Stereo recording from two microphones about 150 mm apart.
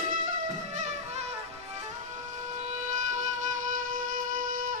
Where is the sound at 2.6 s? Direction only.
50° right (ahead or behind).